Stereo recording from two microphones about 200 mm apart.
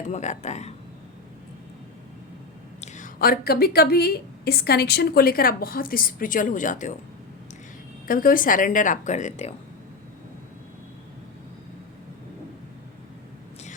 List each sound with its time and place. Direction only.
0.1 s speech: 35° left (ahead or behind)
2.8 s a woman's voice: 40° left (ahead or behind)
8.0 s speech: 45° left (ahead or behind)